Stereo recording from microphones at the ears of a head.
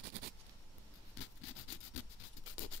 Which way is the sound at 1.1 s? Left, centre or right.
Left.